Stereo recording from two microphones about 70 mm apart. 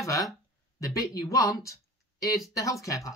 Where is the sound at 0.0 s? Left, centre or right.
Left.